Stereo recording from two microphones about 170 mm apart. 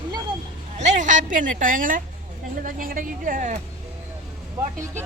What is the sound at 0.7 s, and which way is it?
A woman's voice, 45° right (ahead or behind).